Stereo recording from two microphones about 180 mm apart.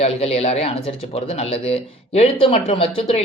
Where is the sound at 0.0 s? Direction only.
35° left (ahead or behind).